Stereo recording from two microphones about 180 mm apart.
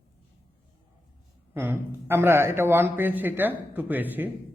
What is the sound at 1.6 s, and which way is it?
Speech, 10° right (ahead or behind).